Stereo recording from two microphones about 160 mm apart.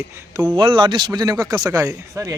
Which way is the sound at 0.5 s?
30° right (ahead or behind).